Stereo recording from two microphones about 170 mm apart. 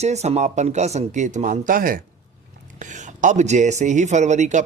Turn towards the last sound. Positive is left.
turn(degrees=-45)  # may be behind; listen again after turning